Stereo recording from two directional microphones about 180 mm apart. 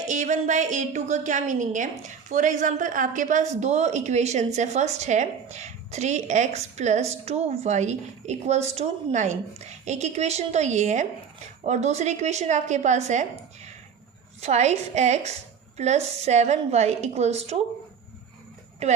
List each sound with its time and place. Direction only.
0.1 s a woman's voice: 45° right (ahead or behind)
14.4 s a woman's voice: 40° right (ahead or behind)
18.8 s a woman's voice: 35° right (ahead or behind)